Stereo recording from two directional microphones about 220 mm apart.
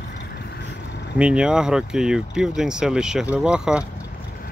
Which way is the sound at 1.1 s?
5° right (ahead or behind).